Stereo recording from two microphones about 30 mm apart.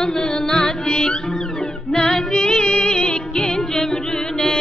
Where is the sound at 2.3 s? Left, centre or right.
Left.